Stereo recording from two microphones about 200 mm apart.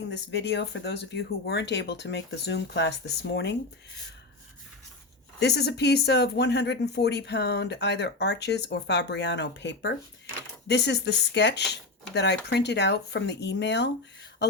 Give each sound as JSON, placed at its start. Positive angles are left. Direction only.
{"t": 0.1, "sound": "speech", "side_deg": 60}
{"t": 5.4, "sound": "speech", "side_deg": 55}